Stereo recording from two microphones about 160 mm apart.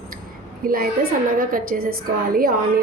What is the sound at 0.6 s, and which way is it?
A woman's voice, 65° right (ahead or behind).